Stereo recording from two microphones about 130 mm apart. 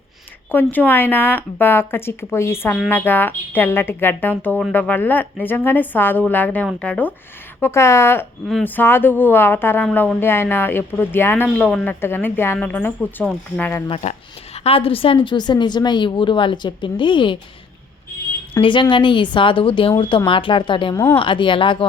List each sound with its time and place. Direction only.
0.5 s speech: 15° left (ahead or behind)
7.6 s speech: 20° left (ahead or behind)
14.0 s a woman's voice: 55° left (ahead or behind); by 17.3 s 40° left (ahead or behind)
18.6 s a woman's voice: 40° left (ahead or behind)
20.9 s speech: 20° left (ahead or behind)
21.2 s a woman's voice: 40° left (ahead or behind)